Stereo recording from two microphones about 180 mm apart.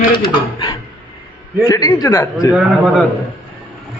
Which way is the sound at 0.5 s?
25° left (ahead or behind).